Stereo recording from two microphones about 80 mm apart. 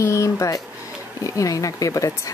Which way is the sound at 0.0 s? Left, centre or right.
Left.